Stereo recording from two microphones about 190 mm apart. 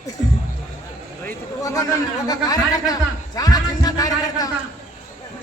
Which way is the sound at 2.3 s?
20° left (ahead or behind).